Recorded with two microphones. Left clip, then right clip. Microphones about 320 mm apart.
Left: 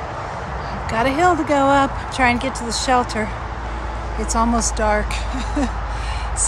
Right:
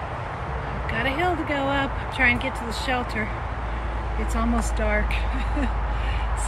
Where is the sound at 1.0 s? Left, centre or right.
Centre.